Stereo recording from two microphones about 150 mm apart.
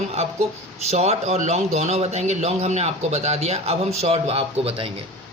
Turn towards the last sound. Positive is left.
turn(degrees=-40)  # may be behind; listen again after turning